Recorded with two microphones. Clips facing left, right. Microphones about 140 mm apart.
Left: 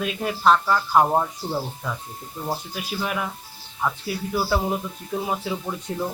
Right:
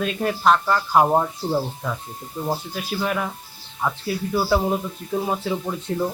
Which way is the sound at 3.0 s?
5° left (ahead or behind).